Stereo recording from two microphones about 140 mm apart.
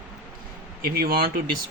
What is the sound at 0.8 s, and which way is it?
Speech, 90° right.